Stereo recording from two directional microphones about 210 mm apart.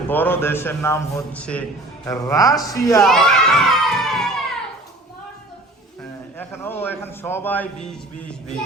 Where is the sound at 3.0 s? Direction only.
Centre (ahead or behind).